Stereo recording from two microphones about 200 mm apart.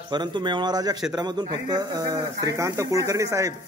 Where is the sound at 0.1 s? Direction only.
20° right (ahead or behind).